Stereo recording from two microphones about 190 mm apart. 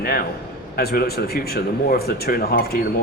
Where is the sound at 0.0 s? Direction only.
55° left (ahead or behind).